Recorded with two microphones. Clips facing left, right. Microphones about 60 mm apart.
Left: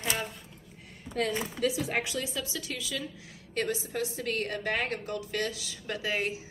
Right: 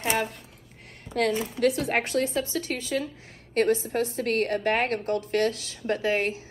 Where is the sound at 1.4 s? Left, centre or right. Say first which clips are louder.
Right 6 dB; right.